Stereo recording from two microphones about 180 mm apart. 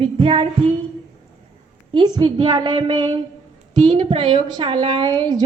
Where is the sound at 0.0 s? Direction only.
30° right (ahead or behind).